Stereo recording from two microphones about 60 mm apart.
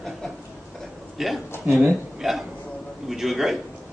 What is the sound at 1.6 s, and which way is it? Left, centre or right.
Speech, right.